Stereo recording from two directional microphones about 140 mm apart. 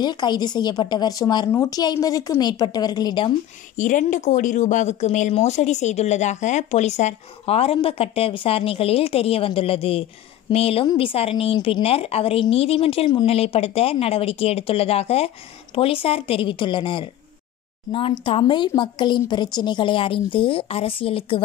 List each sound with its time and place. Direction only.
0.0 s a woman's voice: 30° left (ahead or behind)
3.7 s a woman's voice: 65° left (ahead or behind); by 21.4 s 40° left (ahead or behind)